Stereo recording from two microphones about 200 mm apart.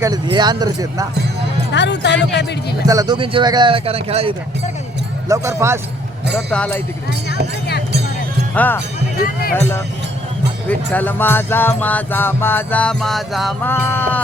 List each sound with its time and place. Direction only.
0.0 s speech: 20° right (ahead or behind)
1.7 s speech: 60° left (ahead or behind)
2.8 s speech: 20° right (ahead or behind)
5.3 s speech: 15° right (ahead or behind)
6.3 s speech: 5° left (ahead or behind)
8.5 s music: 10° left (ahead or behind)
13.7 s music: 10° left (ahead or behind)